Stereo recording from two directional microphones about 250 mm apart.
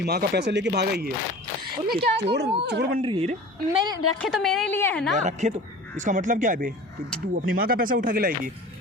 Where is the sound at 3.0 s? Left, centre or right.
Right.